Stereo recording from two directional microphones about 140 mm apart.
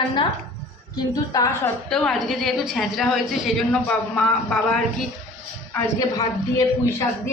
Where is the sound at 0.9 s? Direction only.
25° left (ahead or behind).